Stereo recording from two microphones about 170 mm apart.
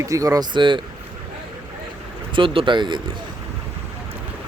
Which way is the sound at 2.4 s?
30° right (ahead or behind).